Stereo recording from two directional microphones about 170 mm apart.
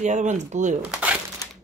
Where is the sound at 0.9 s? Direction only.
10° right (ahead or behind).